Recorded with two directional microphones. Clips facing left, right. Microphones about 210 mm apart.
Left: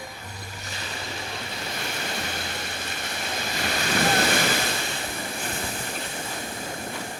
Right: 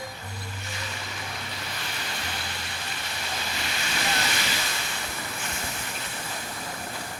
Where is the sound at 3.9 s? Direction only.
50° left (ahead or behind).